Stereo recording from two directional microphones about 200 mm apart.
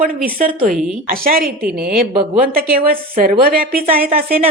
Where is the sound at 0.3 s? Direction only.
45° right (ahead or behind).